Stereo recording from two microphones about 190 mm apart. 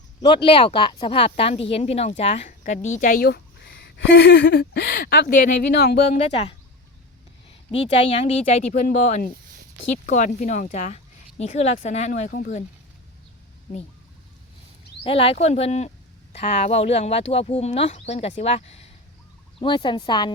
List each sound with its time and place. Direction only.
0.2 s speech: 25° left (ahead or behind); by 6.0 s 50° left (ahead or behind)
6.2 s speech: 30° left (ahead or behind)
7.7 s speech: 30° left (ahead or behind); by 12.6 s 45° left (ahead or behind)
15.0 s speech: 30° left (ahead or behind)